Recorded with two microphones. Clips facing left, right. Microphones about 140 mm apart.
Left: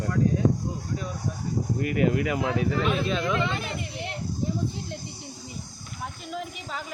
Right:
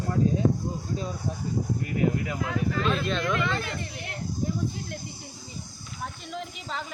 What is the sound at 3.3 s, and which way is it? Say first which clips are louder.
Speech: left 1 dB; 20° left (ahead or behind).